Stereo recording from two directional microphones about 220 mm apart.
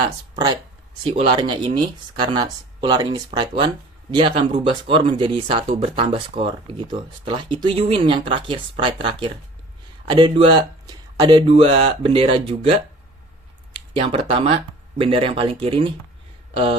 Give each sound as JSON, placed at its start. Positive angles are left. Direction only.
{"t": 1.0, "sound": "speech", "side_deg": -25}